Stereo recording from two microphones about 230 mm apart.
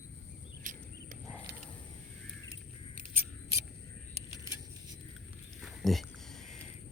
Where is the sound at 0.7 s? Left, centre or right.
Right.